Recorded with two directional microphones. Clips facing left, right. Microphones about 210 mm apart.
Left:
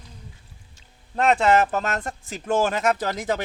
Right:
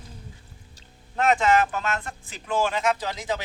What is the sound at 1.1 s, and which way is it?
Speech, 35° left (ahead or behind).